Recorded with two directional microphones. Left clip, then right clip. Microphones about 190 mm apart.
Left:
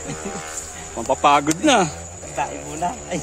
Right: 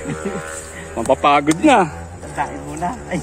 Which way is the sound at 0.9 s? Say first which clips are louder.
Right 2 dB; 10° left (ahead or behind).